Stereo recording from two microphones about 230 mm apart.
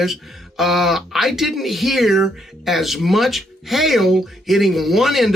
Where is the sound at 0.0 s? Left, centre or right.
Centre.